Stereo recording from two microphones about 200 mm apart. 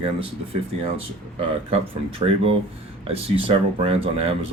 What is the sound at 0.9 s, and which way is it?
Speech, 25° right (ahead or behind).